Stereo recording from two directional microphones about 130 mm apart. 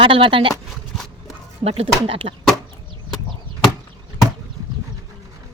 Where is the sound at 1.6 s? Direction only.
50° right (ahead or behind).